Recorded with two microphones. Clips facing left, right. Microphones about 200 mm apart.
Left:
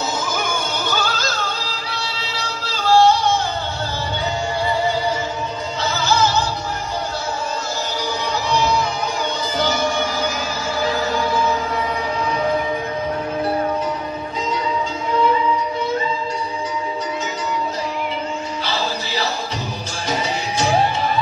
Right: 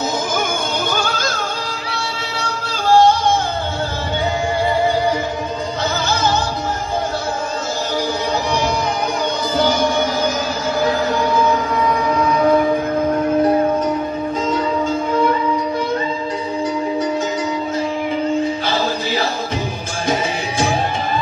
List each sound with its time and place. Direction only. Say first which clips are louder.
0.8 s music: right 2 dB; 50° right (ahead or behind)
2.8 s music: right 1 dB; 50° right (ahead or behind)
8.5 s music: right 1 dB; 55° right (ahead or behind)
12.0 s music: right 6 dB; 50° right (ahead or behind)